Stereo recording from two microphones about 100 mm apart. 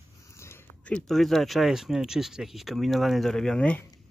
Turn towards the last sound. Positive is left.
turn(degrees=10)  # may be behind; listen again after turning